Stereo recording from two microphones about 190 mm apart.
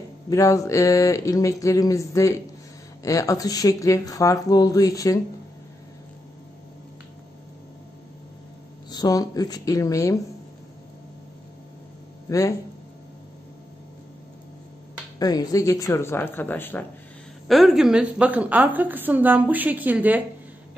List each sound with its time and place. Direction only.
0.3 s speech: 15° left (ahead or behind)
8.9 s speech: 20° left (ahead or behind)
12.3 s speech: 15° left (ahead or behind)
15.1 s speech: 20° left (ahead or behind)
17.5 s a woman's voice: centre (ahead or behind)